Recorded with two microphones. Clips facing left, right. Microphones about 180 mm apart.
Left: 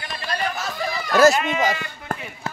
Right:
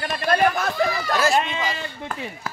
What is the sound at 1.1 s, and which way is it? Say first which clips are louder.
Speech: left 10 dB; 45° left (ahead or behind).